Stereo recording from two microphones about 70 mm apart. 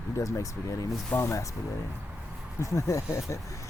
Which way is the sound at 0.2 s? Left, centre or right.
Left.